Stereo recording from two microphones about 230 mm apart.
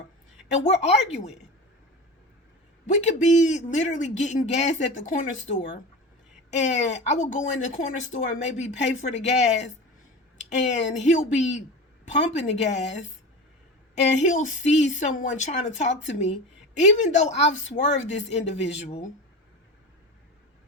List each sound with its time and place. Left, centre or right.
0.4 s speech: left
2.8 s a man's voice: left